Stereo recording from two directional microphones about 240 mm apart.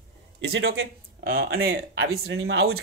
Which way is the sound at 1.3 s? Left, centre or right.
Right.